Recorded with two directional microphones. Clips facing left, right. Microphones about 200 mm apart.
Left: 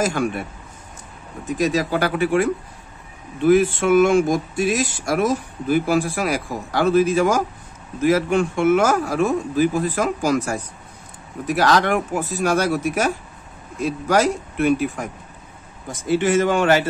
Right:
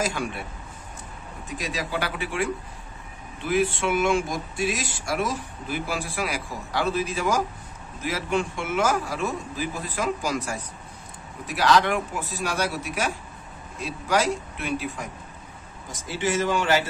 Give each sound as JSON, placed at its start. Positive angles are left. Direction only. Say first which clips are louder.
{"t": 0.0, "sound": "speech", "louder": "left 7 dB", "side_deg": 50}
{"t": 1.6, "sound": "speech", "louder": "left 10 dB", "side_deg": 45}
{"t": 16.1, "sound": "a man's voice", "louder": "left 7 dB", "side_deg": 55}